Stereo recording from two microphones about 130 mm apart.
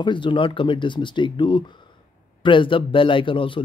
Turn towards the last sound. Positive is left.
turn(degrees=40)  # may be behind; listen again after turning